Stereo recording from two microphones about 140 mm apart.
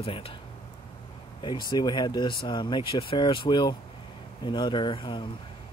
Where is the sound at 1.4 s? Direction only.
35° left (ahead or behind).